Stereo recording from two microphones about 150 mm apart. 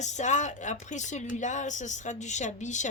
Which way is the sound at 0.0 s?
50° left (ahead or behind).